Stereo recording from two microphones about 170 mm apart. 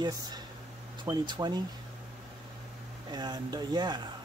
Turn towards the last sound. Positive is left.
turn(degrees=-25)  # may be behind; listen again after turning